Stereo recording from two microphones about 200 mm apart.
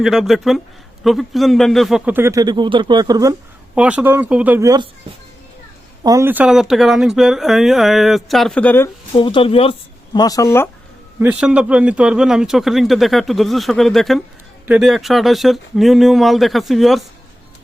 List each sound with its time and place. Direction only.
0.0 s speech: centre (ahead or behind); by 3.3 s 20° right (ahead or behind)
3.8 s speech: 5° right (ahead or behind)
6.0 s speech: 15° right (ahead or behind); by 8.9 s 10° left (ahead or behind)
9.1 s speech: 25° left (ahead or behind)
11.2 s speech: 5° right (ahead or behind)